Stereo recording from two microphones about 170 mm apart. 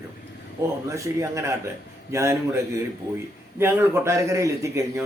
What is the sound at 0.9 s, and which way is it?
A man's voice, 15° right (ahead or behind).